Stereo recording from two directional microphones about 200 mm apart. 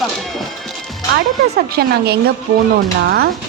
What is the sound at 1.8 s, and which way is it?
Speech, 50° right (ahead or behind).